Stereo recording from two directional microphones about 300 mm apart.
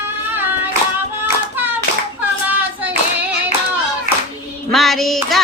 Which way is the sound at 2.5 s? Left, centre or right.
Centre.